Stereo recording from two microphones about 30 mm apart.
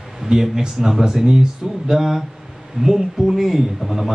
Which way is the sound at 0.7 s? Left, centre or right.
Centre.